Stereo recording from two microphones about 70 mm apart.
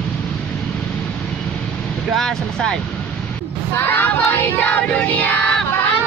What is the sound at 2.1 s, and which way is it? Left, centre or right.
Speech, centre.